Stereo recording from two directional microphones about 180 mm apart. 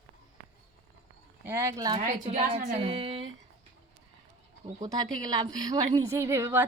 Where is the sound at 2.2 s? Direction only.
40° right (ahead or behind).